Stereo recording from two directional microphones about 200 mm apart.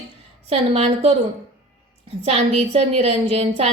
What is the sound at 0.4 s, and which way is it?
Speech, 30° right (ahead or behind).